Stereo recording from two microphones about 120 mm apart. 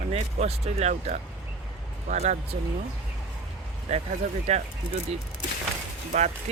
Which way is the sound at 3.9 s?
65° right (ahead or behind).